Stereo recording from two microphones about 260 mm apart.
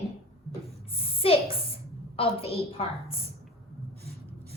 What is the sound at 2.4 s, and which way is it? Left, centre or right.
Speech, left.